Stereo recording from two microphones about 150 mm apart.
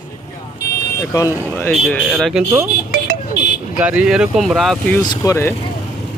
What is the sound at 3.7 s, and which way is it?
Speech, 10° right (ahead or behind).